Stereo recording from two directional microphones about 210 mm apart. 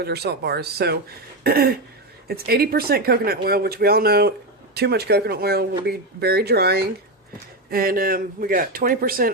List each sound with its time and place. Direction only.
0.0 s speech: 50° right (ahead or behind)